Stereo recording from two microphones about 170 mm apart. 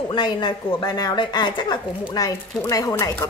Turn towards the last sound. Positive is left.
turn(degrees=20)  # may be behind; listen again after turning